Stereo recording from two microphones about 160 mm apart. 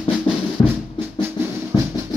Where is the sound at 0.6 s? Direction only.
30° left (ahead or behind).